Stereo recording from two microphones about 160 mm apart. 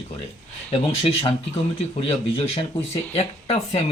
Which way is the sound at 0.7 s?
35° left (ahead or behind).